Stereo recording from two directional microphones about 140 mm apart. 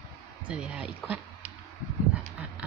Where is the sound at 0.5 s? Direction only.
10° right (ahead or behind).